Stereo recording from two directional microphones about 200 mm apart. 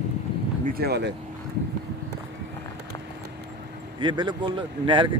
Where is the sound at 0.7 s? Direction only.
55° right (ahead or behind).